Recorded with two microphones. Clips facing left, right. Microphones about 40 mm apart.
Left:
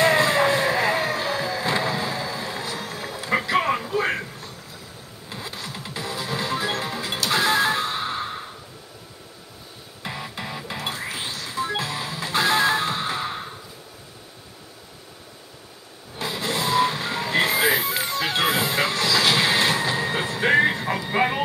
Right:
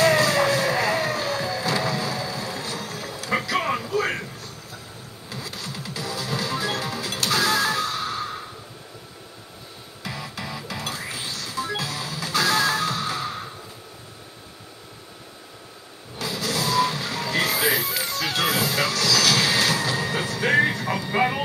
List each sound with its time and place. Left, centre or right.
0.0 s music: left
5.3 s music: left
10.0 s music: left
16.2 s vehicle: left